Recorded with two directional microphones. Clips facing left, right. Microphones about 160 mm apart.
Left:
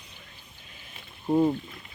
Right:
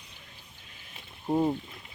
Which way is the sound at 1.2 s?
10° right (ahead or behind).